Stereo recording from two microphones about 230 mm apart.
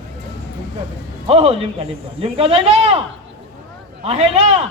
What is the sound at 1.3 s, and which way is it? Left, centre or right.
Speech, right.